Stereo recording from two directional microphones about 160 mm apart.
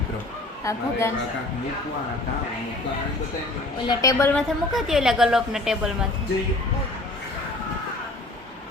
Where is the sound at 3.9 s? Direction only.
20° left (ahead or behind).